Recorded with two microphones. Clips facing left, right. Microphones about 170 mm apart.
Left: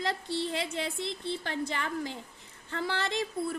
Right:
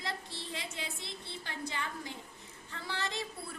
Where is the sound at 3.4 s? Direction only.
45° left (ahead or behind).